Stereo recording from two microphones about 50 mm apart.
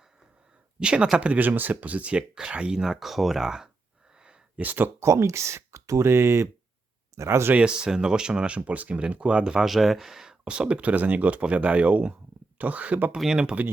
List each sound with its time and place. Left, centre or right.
0.8 s speech: centre
4.2 s a sound: centre
4.6 s speech: right
4.9 s speech: right
7.6 s speech: centre
9.6 s speech: centre
10.4 s speech: right
13.1 s speech: centre
13.4 s speech: right